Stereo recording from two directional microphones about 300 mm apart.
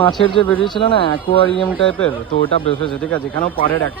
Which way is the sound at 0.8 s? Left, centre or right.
Centre.